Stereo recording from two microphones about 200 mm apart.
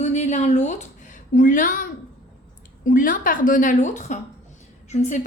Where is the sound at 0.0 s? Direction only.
35° left (ahead or behind).